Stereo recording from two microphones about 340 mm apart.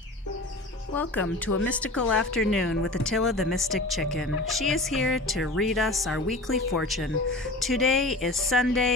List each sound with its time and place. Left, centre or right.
0.9 s speech: centre
1.5 s speech: left
1.7 s speech: centre